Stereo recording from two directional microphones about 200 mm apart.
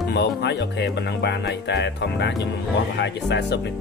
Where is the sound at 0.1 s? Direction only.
60° left (ahead or behind).